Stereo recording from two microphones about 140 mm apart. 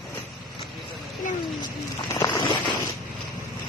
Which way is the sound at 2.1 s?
20° left (ahead or behind).